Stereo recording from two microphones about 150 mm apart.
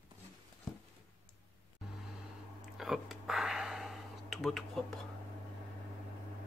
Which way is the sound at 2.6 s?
5° right (ahead or behind).